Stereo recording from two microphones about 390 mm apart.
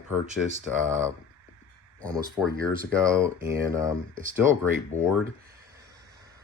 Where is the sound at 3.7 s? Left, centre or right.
Centre.